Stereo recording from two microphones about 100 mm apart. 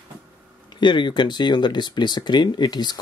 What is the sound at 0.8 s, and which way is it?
Speech, 50° left (ahead or behind).